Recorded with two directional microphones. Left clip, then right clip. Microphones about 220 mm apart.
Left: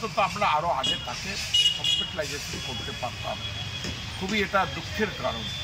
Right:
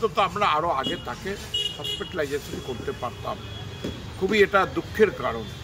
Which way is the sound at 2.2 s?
20° right (ahead or behind).